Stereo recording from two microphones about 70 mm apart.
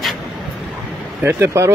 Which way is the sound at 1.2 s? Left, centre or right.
Right.